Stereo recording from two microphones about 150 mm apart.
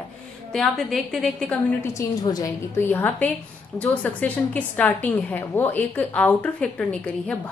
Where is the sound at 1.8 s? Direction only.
20° left (ahead or behind).